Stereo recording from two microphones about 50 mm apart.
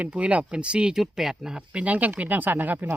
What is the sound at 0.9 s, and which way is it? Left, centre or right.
Speech, centre.